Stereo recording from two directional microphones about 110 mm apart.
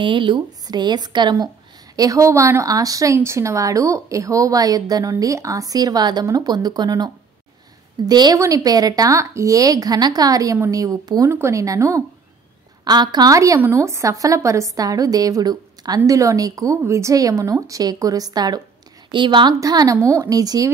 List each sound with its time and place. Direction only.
0.0 s speech: 45° right (ahead or behind)
2.0 s a woman's voice: 30° right (ahead or behind); by 19.5 s 45° right (ahead or behind)
19.6 s speech: 35° right (ahead or behind)